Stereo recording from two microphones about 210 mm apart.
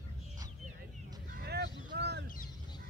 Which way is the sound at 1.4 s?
50° right (ahead or behind).